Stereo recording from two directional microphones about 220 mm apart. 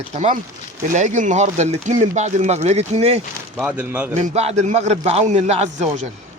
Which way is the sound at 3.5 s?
5° right (ahead or behind).